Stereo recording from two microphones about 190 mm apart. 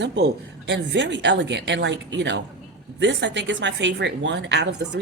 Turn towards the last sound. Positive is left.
turn(degrees=-65)  # may be behind; listen again after turning